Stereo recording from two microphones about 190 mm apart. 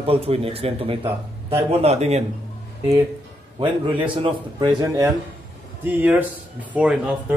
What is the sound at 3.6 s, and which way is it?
A man's voice, 25° right (ahead or behind).